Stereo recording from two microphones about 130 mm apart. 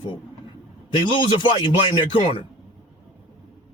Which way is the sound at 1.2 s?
35° left (ahead or behind).